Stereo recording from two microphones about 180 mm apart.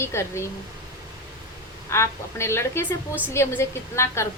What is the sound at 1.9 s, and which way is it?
A woman's voice, 15° left (ahead or behind).